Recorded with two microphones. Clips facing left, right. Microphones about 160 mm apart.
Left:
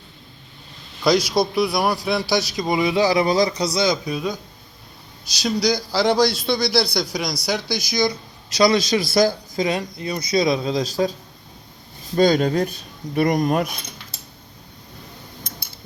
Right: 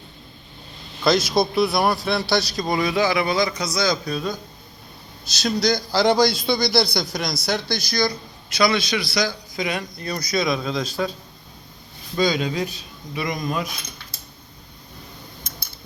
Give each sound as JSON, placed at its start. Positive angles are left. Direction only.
{"t": 1.0, "sound": "a man's voice", "side_deg": 10}
{"t": 3.0, "sound": "a man's voice", "side_deg": 35}
{"t": 3.8, "sound": "a man's voice", "side_deg": 20}
{"t": 5.4, "sound": "a man's voice", "side_deg": 10}
{"t": 8.5, "sound": "a man's voice", "side_deg": 35}
{"t": 10.0, "sound": "a man's voice", "side_deg": 20}
{"t": 12.1, "sound": "speech", "side_deg": 50}